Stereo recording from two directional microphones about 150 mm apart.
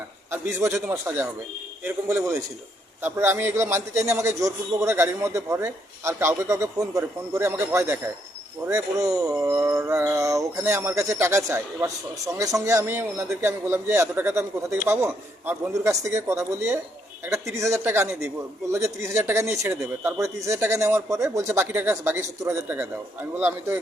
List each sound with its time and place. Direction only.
0.3 s a man's voice: 15° right (ahead or behind)